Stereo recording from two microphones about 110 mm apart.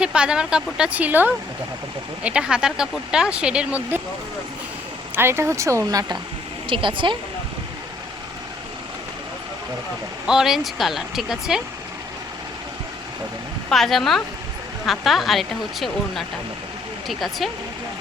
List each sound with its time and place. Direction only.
0.0 s speech: 10° right (ahead or behind)
5.1 s speech: 20° right (ahead or behind)
6.7 s speech: 50° right (ahead or behind)
10.2 s speech: 5° right (ahead or behind)
13.7 s speech: centre (ahead or behind)